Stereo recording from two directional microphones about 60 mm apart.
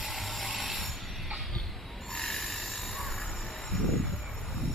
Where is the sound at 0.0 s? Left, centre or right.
Centre.